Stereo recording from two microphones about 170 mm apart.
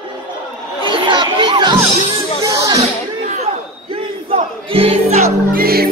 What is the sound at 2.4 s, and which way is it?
Music, 20° right (ahead or behind).